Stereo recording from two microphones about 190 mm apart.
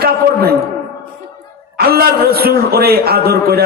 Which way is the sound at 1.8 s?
55° right (ahead or behind).